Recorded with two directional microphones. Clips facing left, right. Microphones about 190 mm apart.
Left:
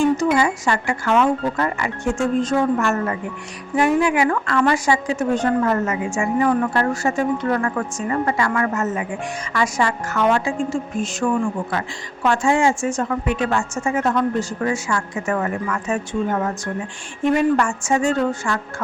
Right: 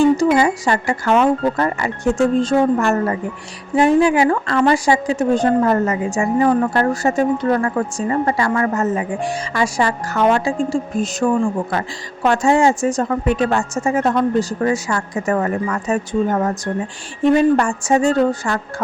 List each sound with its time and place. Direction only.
0.2 s a woman's voice: 35° right (ahead or behind)